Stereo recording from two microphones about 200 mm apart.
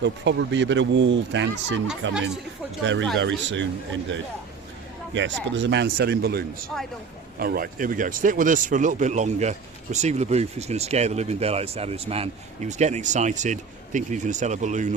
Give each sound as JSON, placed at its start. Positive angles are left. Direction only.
{"t": 0.0, "sound": "speech", "side_deg": -60}
{"t": 5.5, "sound": "speech", "side_deg": -60}